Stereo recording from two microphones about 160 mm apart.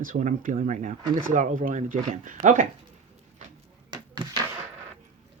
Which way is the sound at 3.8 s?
25° right (ahead or behind).